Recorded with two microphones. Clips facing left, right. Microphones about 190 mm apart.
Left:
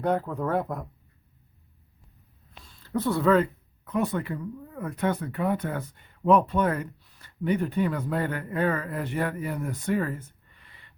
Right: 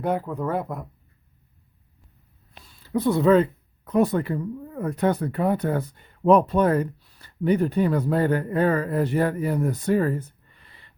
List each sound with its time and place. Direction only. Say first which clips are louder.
0.0 s speech: right 1 dB; 5° right (ahead or behind)
2.6 s a sound: right 3 dB; 10° right (ahead or behind)
3.8 s speech: right 6 dB; 35° right (ahead or behind)